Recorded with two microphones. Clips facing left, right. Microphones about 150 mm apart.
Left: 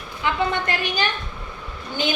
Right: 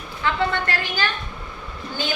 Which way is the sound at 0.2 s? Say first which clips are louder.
Even; 15° left (ahead or behind).